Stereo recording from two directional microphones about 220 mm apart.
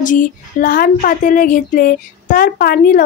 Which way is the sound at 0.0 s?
35° left (ahead or behind).